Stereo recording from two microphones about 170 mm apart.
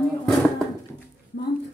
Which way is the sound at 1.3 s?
90° left.